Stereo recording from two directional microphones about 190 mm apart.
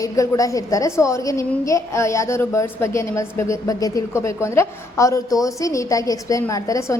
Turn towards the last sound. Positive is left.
turn(degrees=15)  # may be behind; listen again after turning